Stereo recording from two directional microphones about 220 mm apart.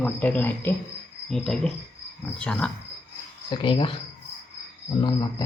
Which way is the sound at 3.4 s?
25° left (ahead or behind).